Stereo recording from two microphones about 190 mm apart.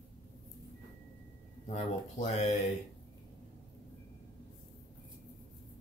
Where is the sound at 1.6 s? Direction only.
35° left (ahead or behind).